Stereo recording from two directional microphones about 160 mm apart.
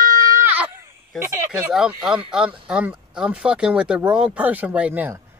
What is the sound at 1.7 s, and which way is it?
Speech, 5° right (ahead or behind).